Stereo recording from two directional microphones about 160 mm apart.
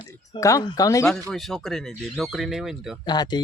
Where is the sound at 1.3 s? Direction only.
Centre (ahead or behind).